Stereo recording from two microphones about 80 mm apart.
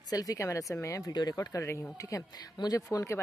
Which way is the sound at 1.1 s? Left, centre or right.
Left.